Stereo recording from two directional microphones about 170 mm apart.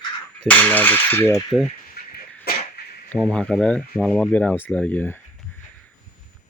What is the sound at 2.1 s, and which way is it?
Dog, 60° left (ahead or behind).